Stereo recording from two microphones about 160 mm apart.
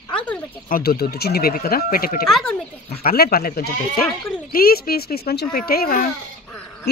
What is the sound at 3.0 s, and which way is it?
Speech, 70° left (ahead or behind).